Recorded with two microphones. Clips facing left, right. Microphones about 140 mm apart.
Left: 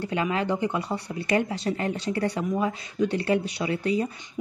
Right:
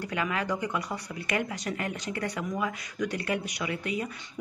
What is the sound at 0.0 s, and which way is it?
Speech, 30° left (ahead or behind).